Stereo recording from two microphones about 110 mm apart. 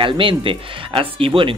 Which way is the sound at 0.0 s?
50° right (ahead or behind).